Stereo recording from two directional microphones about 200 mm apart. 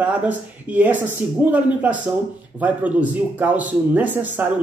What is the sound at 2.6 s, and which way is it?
A man's voice, 10° right (ahead or behind).